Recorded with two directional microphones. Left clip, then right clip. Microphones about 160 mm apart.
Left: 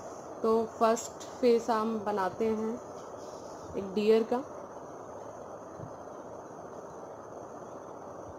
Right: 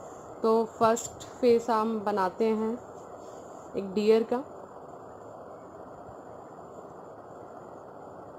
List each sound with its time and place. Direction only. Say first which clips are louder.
0.4 s a woman's voice: right 3 dB; 25° right (ahead or behind)
2.0 s speech: right 3 dB; 25° right (ahead or behind)
3.7 s speech: right 2 dB; 20° right (ahead or behind)